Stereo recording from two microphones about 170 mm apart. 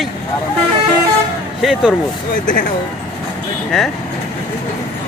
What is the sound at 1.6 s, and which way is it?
Speech, centre (ahead or behind).